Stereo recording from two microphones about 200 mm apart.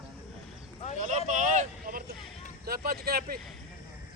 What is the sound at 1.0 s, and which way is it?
Vehicle, 40° right (ahead or behind).